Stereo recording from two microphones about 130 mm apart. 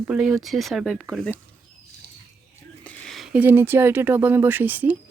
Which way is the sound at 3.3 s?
15° right (ahead or behind).